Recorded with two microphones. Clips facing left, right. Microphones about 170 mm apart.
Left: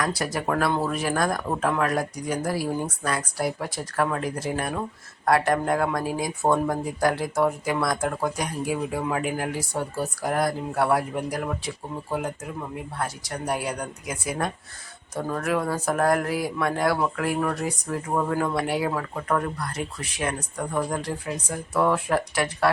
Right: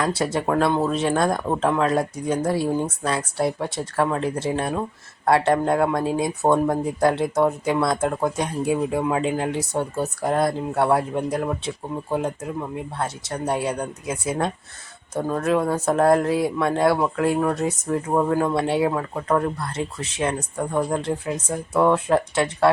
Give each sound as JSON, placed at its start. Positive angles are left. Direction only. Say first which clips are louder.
{"t": 0.0, "sound": "speech", "louder": "right 4 dB", "side_deg": -25}